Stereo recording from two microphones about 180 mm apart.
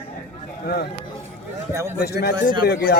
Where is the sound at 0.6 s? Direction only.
60° left (ahead or behind).